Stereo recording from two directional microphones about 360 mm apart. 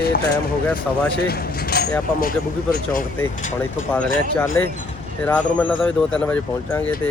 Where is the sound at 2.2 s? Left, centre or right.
Left.